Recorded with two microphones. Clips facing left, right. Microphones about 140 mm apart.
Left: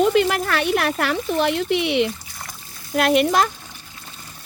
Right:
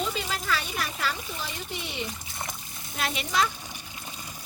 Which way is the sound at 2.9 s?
65° left (ahead or behind).